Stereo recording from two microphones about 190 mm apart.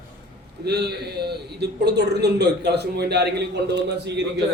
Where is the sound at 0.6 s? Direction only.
60° right (ahead or behind).